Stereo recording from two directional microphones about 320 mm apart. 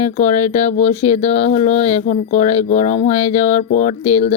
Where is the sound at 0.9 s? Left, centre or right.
Centre.